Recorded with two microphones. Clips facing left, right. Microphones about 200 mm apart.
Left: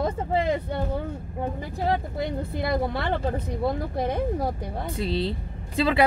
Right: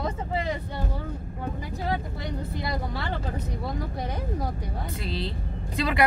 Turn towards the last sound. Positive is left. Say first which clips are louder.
# left 4 dB
turn(degrees=30)  # may be behind; listen again after turning